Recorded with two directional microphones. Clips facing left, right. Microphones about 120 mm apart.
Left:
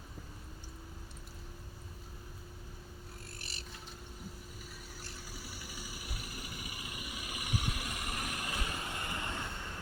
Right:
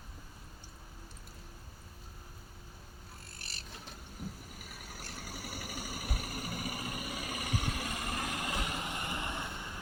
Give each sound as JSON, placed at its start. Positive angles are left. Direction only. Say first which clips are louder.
{"t": 4.7, "sound": "vehicle", "louder": "right 2 dB", "side_deg": -65}